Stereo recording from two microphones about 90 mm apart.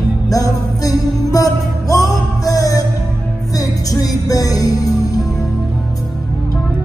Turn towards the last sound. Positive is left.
turn(degrees=40)  # may be behind; listen again after turning